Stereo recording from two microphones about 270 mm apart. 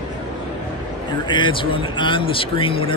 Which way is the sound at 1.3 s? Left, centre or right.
Centre.